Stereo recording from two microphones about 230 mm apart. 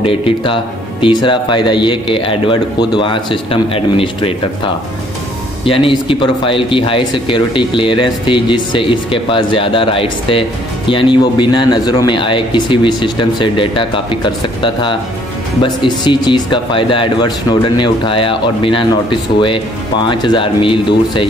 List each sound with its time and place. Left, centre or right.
0.0 s speech: left
5.7 s speech: left